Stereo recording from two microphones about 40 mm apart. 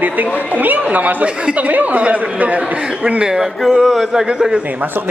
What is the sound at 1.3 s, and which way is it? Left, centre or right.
Speech, right.